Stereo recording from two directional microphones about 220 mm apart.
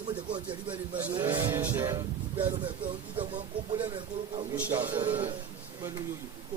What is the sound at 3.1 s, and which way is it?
Speech, 20° right (ahead or behind).